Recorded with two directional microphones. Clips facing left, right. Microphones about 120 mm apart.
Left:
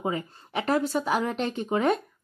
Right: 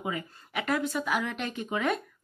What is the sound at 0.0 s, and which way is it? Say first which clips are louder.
A woman's voice: left 5 dB; 30° left (ahead or behind).